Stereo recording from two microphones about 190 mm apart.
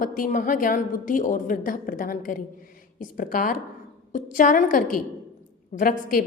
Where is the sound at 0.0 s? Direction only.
45° left (ahead or behind).